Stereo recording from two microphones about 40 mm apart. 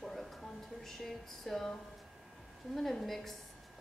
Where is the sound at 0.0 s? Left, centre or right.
Centre.